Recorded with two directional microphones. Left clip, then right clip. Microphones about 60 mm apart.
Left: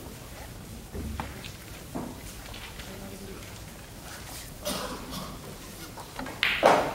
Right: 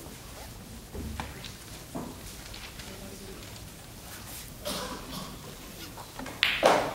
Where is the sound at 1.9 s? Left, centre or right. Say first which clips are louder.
Left 2 dB; right.